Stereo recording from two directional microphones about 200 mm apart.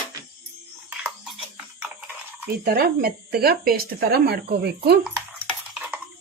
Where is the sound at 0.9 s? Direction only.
5° right (ahead or behind).